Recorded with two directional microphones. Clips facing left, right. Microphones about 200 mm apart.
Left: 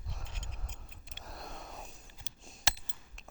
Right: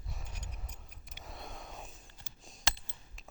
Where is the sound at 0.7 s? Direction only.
25° left (ahead or behind).